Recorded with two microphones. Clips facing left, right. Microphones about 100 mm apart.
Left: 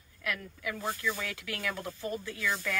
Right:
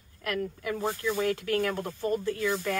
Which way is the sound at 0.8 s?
30° right (ahead or behind).